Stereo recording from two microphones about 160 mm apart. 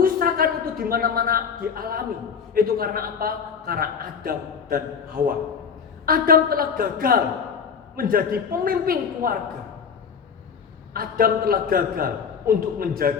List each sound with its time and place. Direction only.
0.0 s a sound: 65° right (ahead or behind)
2.6 s a man's voice: 65° right (ahead or behind)
10.9 s a man's voice: 65° right (ahead or behind)